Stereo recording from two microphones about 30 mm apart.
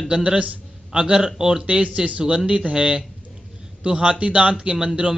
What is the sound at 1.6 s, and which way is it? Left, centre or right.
Speech, right.